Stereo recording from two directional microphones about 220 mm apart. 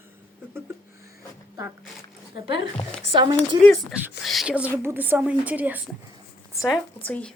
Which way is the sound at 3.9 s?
Centre (ahead or behind).